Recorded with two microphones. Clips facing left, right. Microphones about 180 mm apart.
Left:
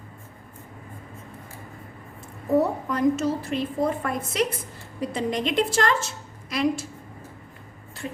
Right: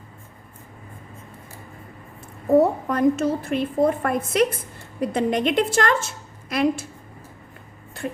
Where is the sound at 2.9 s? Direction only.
55° right (ahead or behind).